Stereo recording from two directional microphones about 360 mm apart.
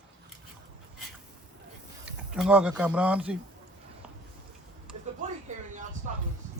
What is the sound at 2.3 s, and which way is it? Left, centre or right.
Speech, centre.